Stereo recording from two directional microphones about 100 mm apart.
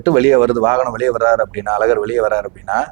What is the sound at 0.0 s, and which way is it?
A man's voice, 15° right (ahead or behind).